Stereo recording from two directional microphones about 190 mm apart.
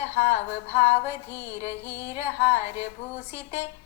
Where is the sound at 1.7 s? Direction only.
15° right (ahead or behind).